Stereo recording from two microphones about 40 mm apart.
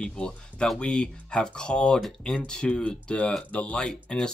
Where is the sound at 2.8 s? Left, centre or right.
Left.